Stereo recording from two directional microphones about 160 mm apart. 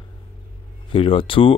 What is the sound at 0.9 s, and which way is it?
Speech, 35° left (ahead or behind).